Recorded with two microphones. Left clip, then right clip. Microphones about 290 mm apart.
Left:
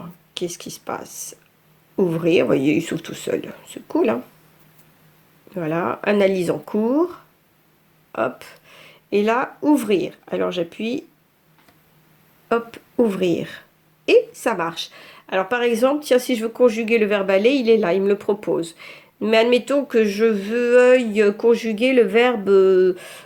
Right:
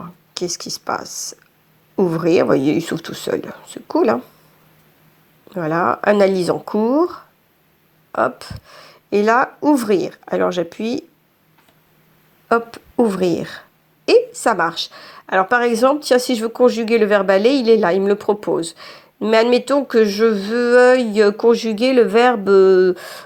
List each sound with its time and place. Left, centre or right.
0.5 s a woman's voice: centre
5.5 s a woman's voice: centre
12.5 s a woman's voice: centre